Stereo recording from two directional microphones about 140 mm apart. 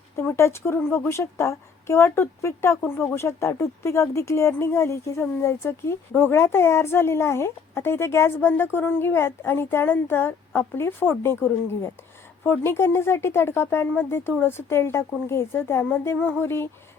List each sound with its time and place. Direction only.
0.2 s a woman's voice: 20° left (ahead or behind)